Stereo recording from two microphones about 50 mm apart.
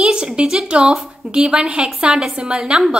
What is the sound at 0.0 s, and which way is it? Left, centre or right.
A woman's voice, centre.